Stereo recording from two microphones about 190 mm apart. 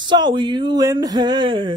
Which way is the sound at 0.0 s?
25° right (ahead or behind).